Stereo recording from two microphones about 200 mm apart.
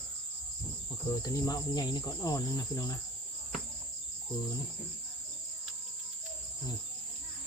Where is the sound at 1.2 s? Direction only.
15° left (ahead or behind).